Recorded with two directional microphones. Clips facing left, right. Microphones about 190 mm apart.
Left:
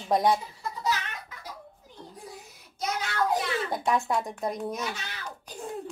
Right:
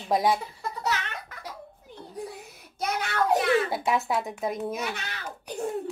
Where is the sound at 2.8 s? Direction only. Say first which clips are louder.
Right 2 dB; 60° right (ahead or behind).